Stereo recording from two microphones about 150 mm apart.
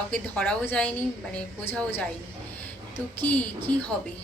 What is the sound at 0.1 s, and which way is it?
A woman's voice, 5° left (ahead or behind).